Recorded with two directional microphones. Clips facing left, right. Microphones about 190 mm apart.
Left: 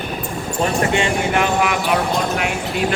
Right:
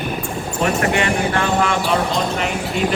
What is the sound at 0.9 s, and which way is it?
Speech, 20° left (ahead or behind).